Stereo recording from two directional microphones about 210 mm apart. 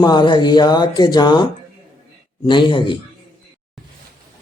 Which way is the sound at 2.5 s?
20° left (ahead or behind).